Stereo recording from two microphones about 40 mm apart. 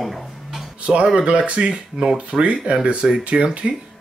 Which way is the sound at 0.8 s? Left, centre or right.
Right.